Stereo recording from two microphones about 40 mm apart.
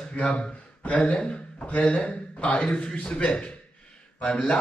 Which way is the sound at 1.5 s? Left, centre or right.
Left.